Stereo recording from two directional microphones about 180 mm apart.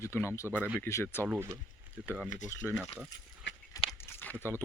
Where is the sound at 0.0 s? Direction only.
15° left (ahead or behind).